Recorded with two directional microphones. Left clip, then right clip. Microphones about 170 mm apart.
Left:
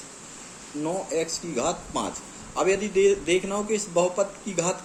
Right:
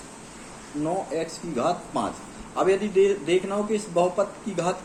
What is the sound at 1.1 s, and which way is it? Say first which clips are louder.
Speech: left 2 dB; 30° left (ahead or behind).